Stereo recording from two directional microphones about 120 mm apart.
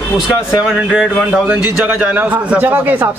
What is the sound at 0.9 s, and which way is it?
A man's voice, 10° right (ahead or behind).